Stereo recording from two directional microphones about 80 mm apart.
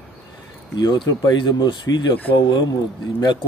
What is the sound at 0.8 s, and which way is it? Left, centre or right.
Speech, left.